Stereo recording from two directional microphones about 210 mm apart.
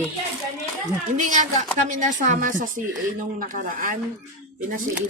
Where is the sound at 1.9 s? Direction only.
35° right (ahead or behind).